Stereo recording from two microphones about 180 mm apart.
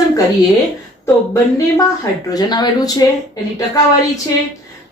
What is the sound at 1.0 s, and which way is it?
A woman's voice, 15° left (ahead or behind).